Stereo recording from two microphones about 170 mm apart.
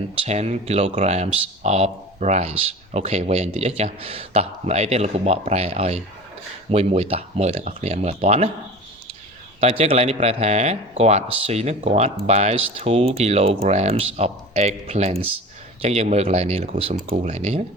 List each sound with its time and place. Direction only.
0.2 s speech: 40° right (ahead or behind)
9.6 s speech: 40° right (ahead or behind)